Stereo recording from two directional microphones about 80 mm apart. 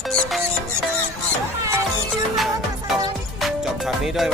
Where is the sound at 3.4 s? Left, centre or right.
Centre.